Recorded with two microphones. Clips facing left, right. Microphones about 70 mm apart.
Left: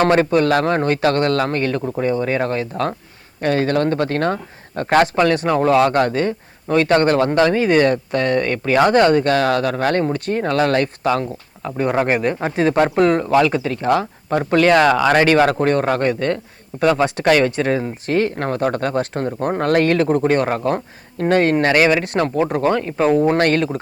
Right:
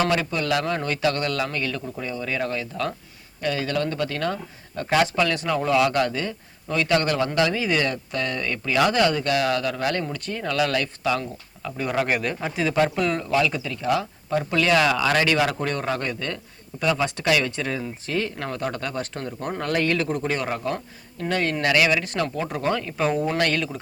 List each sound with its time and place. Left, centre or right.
0.0 s speech: left